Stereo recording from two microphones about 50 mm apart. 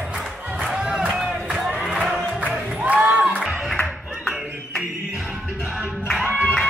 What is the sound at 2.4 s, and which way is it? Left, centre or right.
Music, right.